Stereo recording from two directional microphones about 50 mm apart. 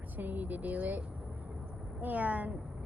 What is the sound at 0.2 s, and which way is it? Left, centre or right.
A woman's voice, right.